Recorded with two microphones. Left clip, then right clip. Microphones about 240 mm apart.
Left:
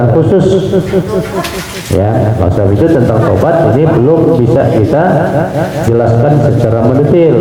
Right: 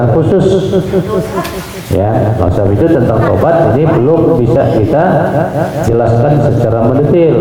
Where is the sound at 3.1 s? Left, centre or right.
Centre.